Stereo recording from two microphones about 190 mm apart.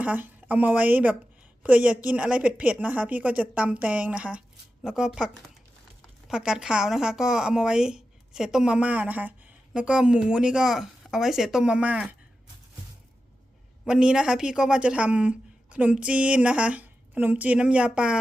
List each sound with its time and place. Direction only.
0.0 s speech: 10° right (ahead or behind)
13.8 s speech: 5° right (ahead or behind)